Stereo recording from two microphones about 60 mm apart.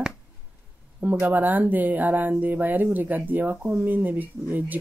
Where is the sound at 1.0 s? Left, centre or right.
Right.